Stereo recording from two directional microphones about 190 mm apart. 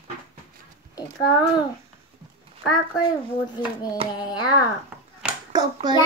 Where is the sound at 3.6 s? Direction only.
20° left (ahead or behind).